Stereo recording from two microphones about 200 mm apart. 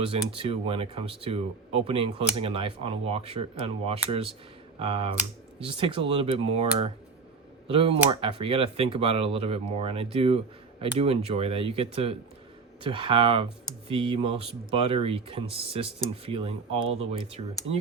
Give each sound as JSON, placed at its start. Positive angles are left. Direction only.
{"t": 0.0, "sound": "speech", "side_deg": -25}
{"t": 7.7, "sound": "speech", "side_deg": -30}